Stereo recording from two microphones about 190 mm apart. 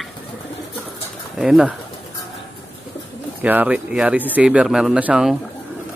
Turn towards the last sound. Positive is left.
turn(degrees=-5)  # may be behind; listen again after turning